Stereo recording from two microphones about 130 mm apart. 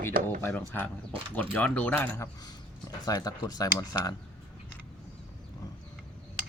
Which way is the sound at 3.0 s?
30° left (ahead or behind).